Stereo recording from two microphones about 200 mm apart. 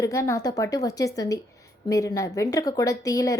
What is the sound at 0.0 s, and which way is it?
A woman's voice, 15° left (ahead or behind).